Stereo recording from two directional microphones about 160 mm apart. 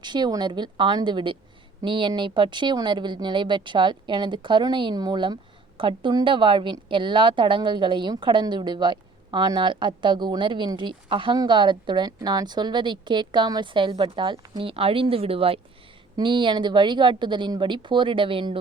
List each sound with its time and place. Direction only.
0.0 s speech: 30° right (ahead or behind)
14.6 s speech: 35° right (ahead or behind)